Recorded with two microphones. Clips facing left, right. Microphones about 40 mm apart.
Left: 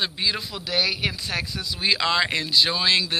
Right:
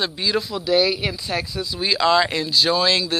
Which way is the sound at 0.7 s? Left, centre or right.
Left.